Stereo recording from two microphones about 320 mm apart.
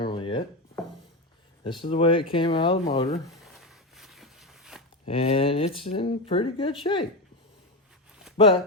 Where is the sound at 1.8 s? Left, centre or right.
Centre.